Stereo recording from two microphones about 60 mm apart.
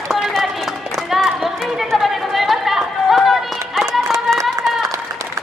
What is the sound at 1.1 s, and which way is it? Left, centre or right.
Chatter, centre.